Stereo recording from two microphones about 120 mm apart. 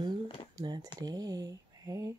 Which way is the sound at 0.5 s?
35° right (ahead or behind).